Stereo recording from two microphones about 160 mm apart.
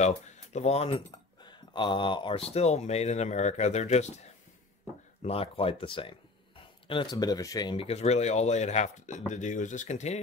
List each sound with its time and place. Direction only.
0.0 s speech: 45° left (ahead or behind)
5.2 s speech: 35° left (ahead or behind)
7.7 s speech: 40° left (ahead or behind)